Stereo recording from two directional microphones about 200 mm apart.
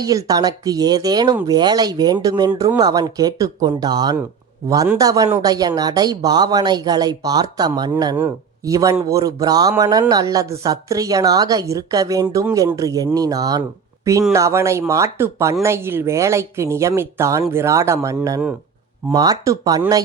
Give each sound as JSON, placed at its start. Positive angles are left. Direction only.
{"t": 0.0, "sound": "speech", "side_deg": -15}